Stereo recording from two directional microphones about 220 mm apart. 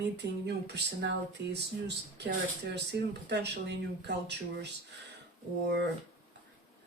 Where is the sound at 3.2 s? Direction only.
50° right (ahead or behind).